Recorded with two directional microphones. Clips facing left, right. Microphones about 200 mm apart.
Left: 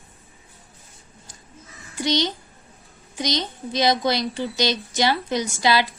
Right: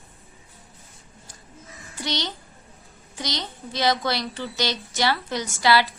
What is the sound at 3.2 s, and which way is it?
A child's voice, 15° left (ahead or behind).